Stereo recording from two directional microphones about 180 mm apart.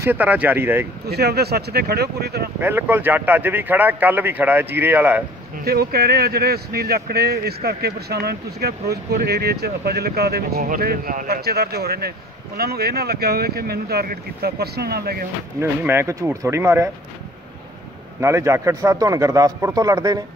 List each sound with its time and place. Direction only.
0.0 s speech: 10° right (ahead or behind)
1.0 s speech: 60° right (ahead or behind)
2.6 s speech: 10° right (ahead or behind)
5.7 s speech: 60° right (ahead or behind)
15.6 s speech: 15° right (ahead or behind)
18.2 s speech: 15° right (ahead or behind)